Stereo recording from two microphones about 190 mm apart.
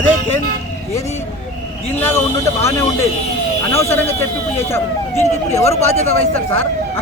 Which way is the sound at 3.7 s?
15° left (ahead or behind).